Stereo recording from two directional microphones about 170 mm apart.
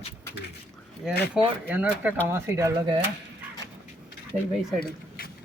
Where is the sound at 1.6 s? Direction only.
10° right (ahead or behind).